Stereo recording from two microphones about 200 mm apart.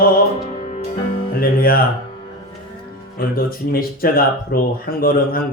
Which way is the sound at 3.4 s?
45° left (ahead or behind).